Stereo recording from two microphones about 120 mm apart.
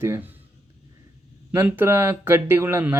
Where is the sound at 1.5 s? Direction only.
15° right (ahead or behind).